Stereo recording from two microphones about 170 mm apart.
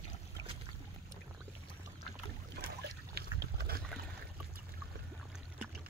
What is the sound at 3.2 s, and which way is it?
Boat, 70° right (ahead or behind).